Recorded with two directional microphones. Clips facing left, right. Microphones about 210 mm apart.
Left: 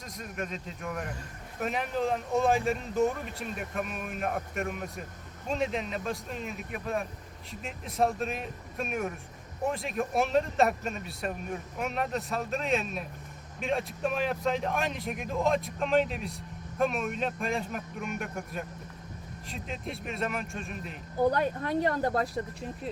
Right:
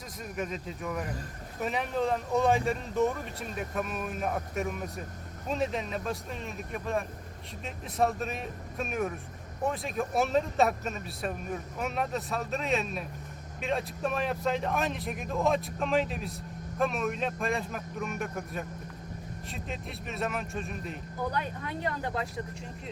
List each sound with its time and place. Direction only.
0.3 s a man's voice: centre (ahead or behind)
4.2 s a man's voice: centre (ahead or behind)
21.3 s speech: 40° left (ahead or behind)